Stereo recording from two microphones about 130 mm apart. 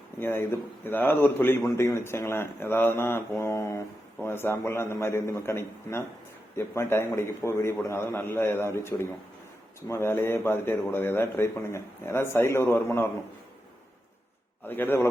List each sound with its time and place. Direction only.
0.2 s a man's voice: 15° left (ahead or behind)
14.6 s a man's voice: 15° left (ahead or behind)